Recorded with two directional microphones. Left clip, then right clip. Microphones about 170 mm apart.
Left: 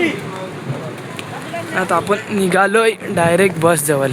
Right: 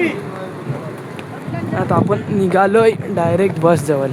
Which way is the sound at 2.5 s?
10° right (ahead or behind).